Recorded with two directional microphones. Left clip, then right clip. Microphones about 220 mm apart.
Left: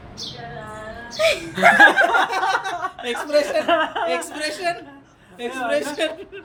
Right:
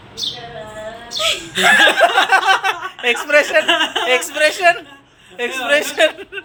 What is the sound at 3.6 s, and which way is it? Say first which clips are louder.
Speech: right 4 dB; 45° left (ahead or behind).